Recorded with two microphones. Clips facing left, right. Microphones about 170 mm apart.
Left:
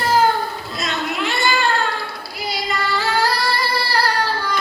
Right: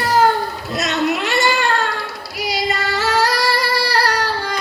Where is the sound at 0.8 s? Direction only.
80° right.